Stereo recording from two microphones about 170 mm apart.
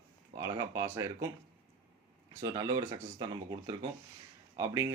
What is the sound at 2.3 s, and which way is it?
Speech, 20° right (ahead or behind).